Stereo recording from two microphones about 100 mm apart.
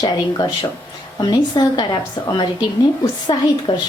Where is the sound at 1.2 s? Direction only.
45° left (ahead or behind).